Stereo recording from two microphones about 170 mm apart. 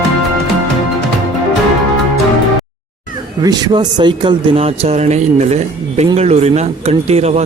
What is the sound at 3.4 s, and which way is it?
Speech, 25° right (ahead or behind).